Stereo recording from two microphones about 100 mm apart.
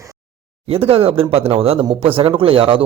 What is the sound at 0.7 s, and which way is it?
Speech, 80° right.